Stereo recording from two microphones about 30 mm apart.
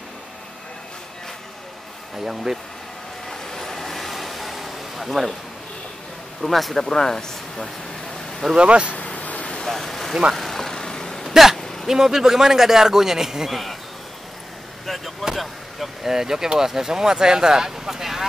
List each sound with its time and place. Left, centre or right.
2.1 s speech: centre
3.4 s vehicle: centre
6.4 s speech: centre
6.7 s speech: centre
8.5 s speech: right
8.9 s vehicle: left
9.7 s vehicle: centre
11.2 s vehicle: centre
11.5 s a sound: centre
11.9 s speech: centre
13.5 s speech: centre
15.3 s speech: centre
16.1 s speech: centre